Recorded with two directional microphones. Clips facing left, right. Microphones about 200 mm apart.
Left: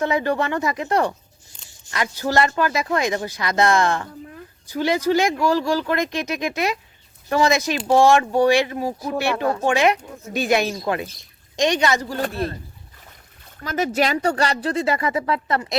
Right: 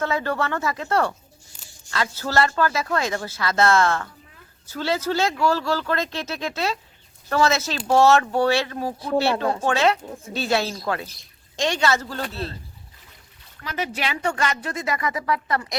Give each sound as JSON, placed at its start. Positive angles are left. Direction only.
{"t": 0.0, "sound": "speech", "side_deg": 15}
{"t": 12.2, "sound": "a man's voice", "side_deg": 50}
{"t": 13.6, "sound": "speech", "side_deg": 45}